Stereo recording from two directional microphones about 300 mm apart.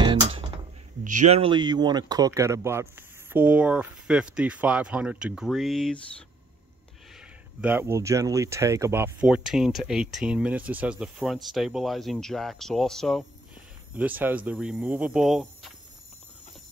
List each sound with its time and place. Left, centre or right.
0.0 s a sound: centre
1.0 s speech: right; by 5.9 s centre
7.2 s speech: centre